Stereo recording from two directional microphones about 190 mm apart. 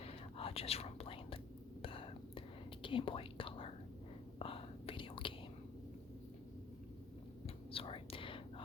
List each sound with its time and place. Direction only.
0.0 s whispering: 30° left (ahead or behind)
7.4 s whispering: 30° left (ahead or behind)